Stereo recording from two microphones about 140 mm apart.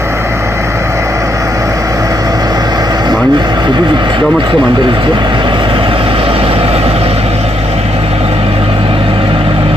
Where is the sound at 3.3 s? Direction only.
30° right (ahead or behind).